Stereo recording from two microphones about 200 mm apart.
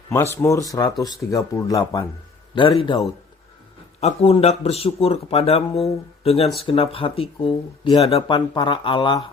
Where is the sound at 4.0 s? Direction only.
30° left (ahead or behind).